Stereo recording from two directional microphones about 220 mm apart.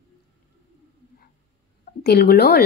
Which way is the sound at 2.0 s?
45° left (ahead or behind).